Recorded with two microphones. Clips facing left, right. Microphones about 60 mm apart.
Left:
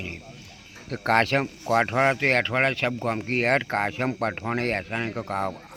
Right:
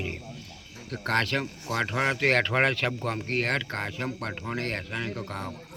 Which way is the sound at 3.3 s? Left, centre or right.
Left.